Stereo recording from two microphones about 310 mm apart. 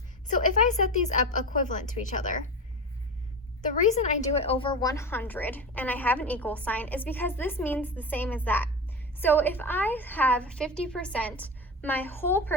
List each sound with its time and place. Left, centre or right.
0.3 s a woman's voice: left
3.8 s a woman's voice: left; by 12.5 s centre